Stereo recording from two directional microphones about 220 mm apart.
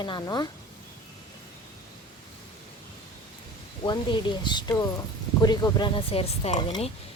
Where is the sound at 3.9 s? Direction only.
20° left (ahead or behind).